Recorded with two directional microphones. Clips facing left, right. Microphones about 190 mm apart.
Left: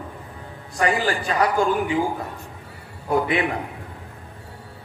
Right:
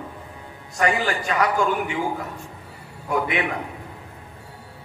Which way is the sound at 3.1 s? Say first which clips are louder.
Left 3 dB; 35° left (ahead or behind).